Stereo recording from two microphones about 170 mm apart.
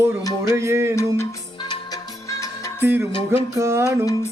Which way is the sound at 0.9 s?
15° left (ahead or behind).